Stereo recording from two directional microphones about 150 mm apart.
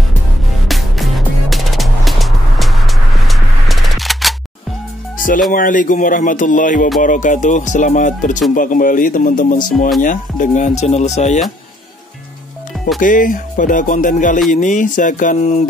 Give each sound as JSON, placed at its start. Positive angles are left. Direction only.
{"t": 0.7, "sound": "music", "side_deg": 0}
{"t": 5.5, "sound": "music", "side_deg": 65}
{"t": 10.8, "sound": "speech", "side_deg": 50}
{"t": 13.0, "sound": "music", "side_deg": 60}